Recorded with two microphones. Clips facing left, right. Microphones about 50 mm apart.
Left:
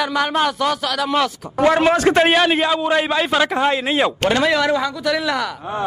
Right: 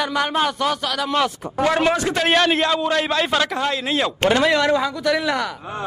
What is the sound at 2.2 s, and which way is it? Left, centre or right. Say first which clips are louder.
A man's voice: left 2 dB; centre.